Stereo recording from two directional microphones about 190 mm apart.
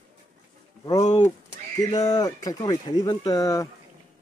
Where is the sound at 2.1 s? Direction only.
20° left (ahead or behind).